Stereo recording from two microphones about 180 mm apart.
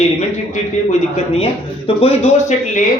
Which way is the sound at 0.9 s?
35° left (ahead or behind).